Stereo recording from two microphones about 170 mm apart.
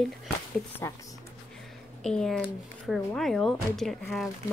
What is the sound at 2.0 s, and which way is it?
Speech, 5° left (ahead or behind).